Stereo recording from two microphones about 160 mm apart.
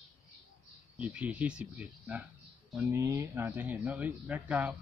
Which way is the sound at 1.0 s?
10° right (ahead or behind).